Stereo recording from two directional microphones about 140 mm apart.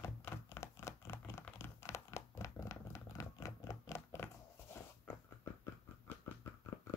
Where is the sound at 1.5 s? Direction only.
20° left (ahead or behind).